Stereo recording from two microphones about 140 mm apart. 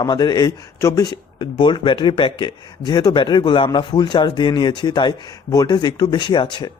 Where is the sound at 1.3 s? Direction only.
35° left (ahead or behind).